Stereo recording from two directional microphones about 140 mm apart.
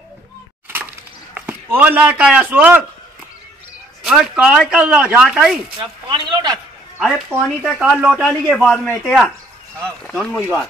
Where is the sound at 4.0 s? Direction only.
5° right (ahead or behind).